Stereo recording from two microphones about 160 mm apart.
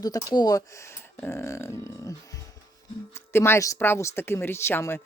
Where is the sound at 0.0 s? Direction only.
25° left (ahead or behind).